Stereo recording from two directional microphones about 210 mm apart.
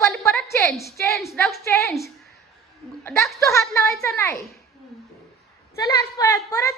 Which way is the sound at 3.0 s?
10° left (ahead or behind).